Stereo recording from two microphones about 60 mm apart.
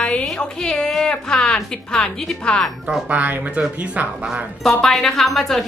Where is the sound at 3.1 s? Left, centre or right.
Right.